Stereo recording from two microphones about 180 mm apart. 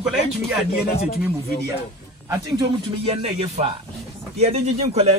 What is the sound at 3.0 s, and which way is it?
Speech, 30° right (ahead or behind).